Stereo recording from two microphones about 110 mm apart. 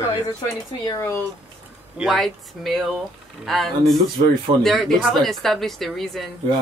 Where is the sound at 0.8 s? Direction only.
25° left (ahead or behind).